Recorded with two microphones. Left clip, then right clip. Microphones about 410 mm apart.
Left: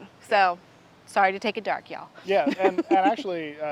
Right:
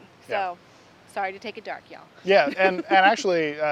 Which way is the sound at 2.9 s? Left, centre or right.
Right.